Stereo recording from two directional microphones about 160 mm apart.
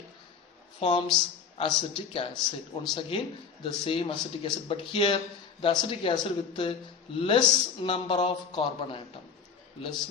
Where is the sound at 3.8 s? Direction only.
35° left (ahead or behind).